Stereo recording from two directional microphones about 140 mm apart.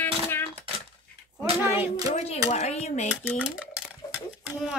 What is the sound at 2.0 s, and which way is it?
Speech, 55° left (ahead or behind).